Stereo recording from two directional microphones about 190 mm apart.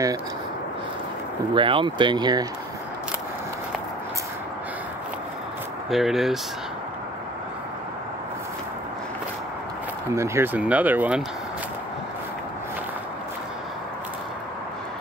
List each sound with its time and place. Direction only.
1.5 s speech: 25° right (ahead or behind)
5.9 s speech: centre (ahead or behind)
10.1 s speech: 15° right (ahead or behind)